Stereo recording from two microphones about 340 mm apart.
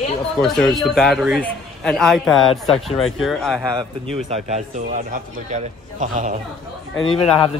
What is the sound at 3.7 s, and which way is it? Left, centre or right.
A man's voice, centre.